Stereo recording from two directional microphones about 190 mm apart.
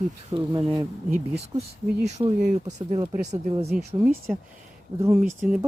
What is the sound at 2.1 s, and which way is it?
Speech, 35° right (ahead or behind).